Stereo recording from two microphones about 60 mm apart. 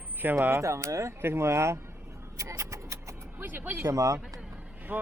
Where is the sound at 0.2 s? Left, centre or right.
Right.